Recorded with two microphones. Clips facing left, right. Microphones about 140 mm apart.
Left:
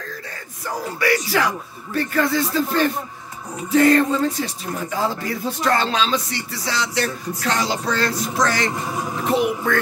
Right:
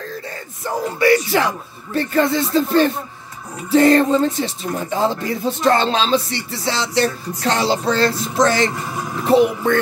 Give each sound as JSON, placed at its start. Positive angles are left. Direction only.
{"t": 0.7, "sound": "speech", "side_deg": -25}